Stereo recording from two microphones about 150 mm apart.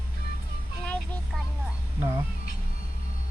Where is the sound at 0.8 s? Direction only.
5° left (ahead or behind).